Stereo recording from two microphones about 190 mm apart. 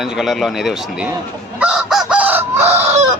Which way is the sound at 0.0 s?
Centre (ahead or behind).